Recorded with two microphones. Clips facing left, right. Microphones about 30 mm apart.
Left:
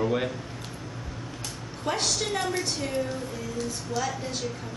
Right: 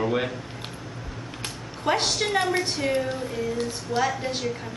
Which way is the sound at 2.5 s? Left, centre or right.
Right.